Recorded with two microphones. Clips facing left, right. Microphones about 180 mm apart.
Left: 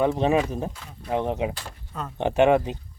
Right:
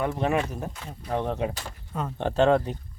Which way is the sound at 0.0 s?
20° left (ahead or behind).